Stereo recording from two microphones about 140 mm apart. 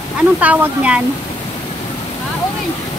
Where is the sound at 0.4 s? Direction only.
10° right (ahead or behind).